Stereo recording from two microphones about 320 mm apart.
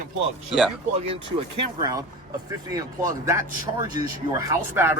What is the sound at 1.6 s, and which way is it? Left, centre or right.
Speech, centre.